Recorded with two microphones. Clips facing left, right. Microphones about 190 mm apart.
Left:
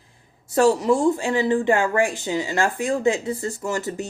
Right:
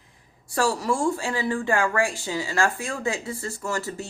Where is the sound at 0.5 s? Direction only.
20° left (ahead or behind).